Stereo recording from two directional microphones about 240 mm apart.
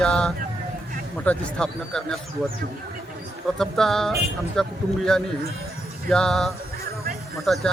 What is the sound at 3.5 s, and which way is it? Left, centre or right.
Speech, centre.